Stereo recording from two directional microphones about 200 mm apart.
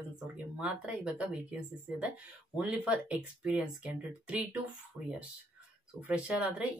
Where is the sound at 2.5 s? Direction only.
5° right (ahead or behind).